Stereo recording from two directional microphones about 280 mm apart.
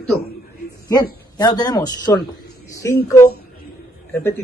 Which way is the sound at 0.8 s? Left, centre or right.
Centre.